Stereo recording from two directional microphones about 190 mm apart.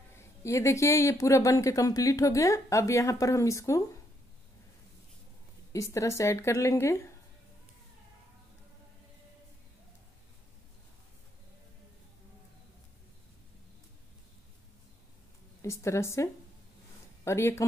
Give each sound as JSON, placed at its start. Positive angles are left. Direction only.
{"t": 0.2, "sound": "speech", "side_deg": 15}
{"t": 5.7, "sound": "speech", "side_deg": 15}
{"t": 15.6, "sound": "speech", "side_deg": 15}